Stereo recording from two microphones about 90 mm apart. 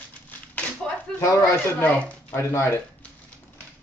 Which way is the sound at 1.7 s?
15° left (ahead or behind).